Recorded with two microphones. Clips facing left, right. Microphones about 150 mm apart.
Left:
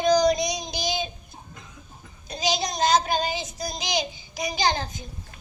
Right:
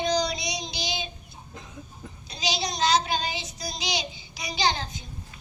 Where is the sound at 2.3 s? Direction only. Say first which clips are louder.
Left 4 dB; 50° left (ahead or behind).